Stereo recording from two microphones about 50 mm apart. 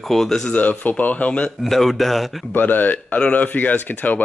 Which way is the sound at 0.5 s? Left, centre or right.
Left.